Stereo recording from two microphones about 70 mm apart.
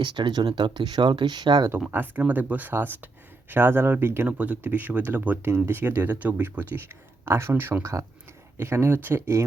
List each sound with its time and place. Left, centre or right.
0.0 s speech: right
1.9 s speech: right
4.3 s speech: right
7.5 s speech: right
7.8 s speech: right